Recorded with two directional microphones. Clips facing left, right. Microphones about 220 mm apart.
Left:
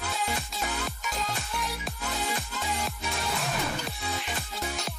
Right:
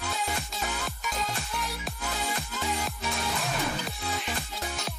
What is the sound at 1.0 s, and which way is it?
Music, centre (ahead or behind).